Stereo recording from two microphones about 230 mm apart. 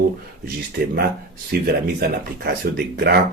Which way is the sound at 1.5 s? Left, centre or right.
Right.